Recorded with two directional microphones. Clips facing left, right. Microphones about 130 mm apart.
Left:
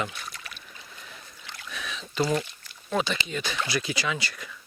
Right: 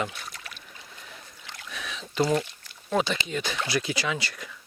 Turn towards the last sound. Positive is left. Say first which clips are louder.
# right 1 dB
turn(degrees=-50)  # may be behind; listen again after turning